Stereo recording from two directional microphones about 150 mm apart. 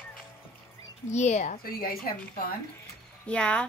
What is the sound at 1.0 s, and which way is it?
Speech, 50° left (ahead or behind).